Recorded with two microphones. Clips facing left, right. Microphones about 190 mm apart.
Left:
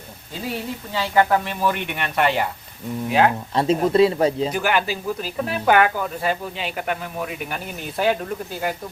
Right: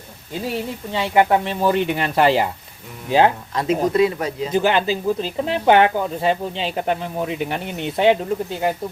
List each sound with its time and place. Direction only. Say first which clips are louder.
0.9 s speech: right 2 dB; 20° right (ahead or behind)
3.5 s speech: left 1 dB; 30° left (ahead or behind)
4.5 s speech: right 4 dB; 20° right (ahead or behind)